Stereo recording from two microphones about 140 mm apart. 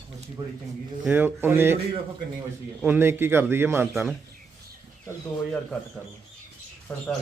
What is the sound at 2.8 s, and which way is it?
A man's voice, 15° right (ahead or behind).